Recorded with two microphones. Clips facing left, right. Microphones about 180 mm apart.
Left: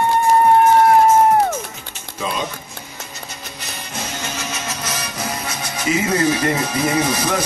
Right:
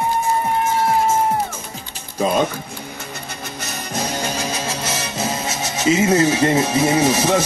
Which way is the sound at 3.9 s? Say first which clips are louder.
Right 5 dB; 35° right (ahead or behind).